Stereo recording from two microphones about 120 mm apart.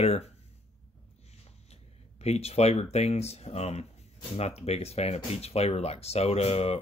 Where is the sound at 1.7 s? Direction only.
60° left (ahead or behind).